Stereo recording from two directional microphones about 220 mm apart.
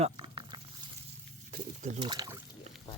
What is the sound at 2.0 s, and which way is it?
Speech, 20° right (ahead or behind).